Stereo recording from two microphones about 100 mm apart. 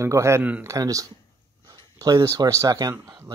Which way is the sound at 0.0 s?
30° right (ahead or behind).